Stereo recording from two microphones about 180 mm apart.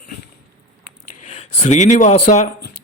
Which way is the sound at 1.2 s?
35° left (ahead or behind).